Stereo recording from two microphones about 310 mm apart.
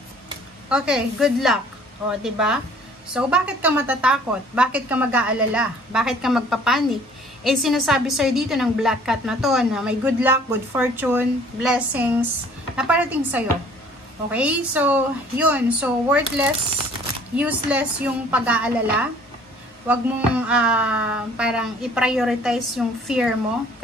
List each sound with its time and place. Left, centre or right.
0.7 s a woman's voice: centre